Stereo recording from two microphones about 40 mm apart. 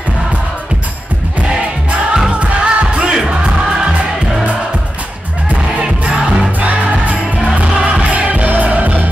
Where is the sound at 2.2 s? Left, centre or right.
Right.